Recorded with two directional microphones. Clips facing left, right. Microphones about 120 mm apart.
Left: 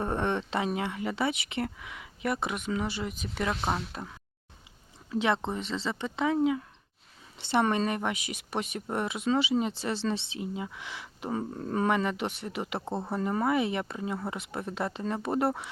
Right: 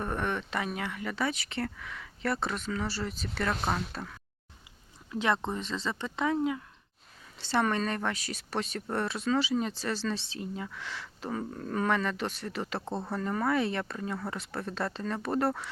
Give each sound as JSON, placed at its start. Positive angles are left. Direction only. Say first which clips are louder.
{"t": 0.0, "sound": "speech", "louder": "left 3 dB", "side_deg": 25}
{"t": 5.2, "sound": "speech", "louder": "even", "side_deg": 20}